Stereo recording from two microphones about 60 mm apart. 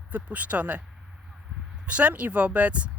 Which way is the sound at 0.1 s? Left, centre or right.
Right.